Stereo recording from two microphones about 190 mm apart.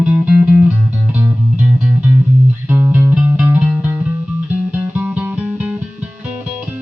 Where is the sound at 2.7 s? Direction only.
10° right (ahead or behind).